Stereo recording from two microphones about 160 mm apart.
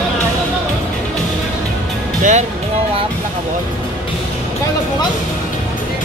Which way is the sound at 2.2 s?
50° right (ahead or behind).